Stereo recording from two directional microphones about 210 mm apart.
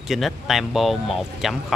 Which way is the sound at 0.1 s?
Centre (ahead or behind).